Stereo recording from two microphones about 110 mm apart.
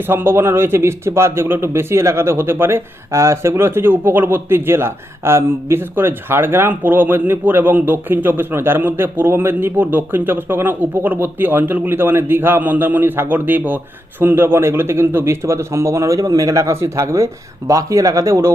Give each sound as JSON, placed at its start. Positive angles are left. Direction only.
{"t": 0.1, "sound": "speech", "side_deg": -20}